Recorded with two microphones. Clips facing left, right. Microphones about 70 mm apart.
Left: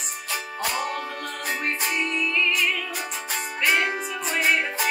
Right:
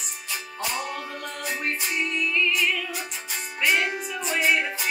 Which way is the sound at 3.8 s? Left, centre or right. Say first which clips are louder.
Left 2 dB; left.